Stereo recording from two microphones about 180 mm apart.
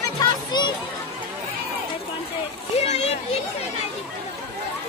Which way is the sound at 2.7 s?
35° left (ahead or behind).